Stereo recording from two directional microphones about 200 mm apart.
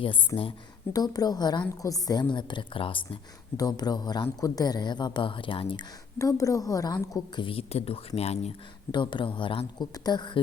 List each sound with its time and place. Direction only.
0.0 s speech: 25° left (ahead or behind)